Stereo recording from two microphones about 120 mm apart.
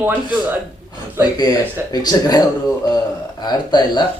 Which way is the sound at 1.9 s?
35° left (ahead or behind).